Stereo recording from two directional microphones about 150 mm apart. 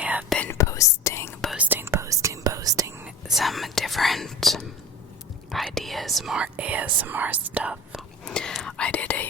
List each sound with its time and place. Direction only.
0.0 s whispering: 10° right (ahead or behind)
0.3 s whispering: 15° left (ahead or behind)
1.5 s whispering: 10° right (ahead or behind)
3.2 s whispering: centre (ahead or behind)
8.2 s whispering: 5° left (ahead or behind)